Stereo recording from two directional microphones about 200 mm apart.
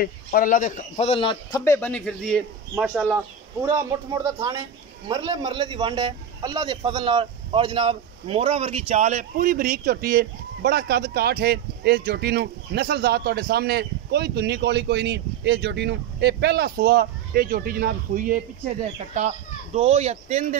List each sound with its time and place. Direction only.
0.0 s a man's voice: 45° left (ahead or behind); by 2.4 s 5° left (ahead or behind)
3.6 s speech: 15° right (ahead or behind); by 20.4 s 35° right (ahead or behind)